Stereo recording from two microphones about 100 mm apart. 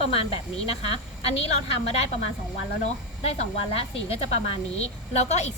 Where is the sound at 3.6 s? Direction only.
80° left.